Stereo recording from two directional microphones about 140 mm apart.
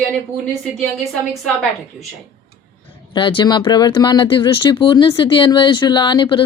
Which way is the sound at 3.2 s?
35° left (ahead or behind).